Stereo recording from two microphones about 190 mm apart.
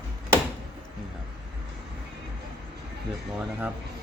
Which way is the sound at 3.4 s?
5° right (ahead or behind).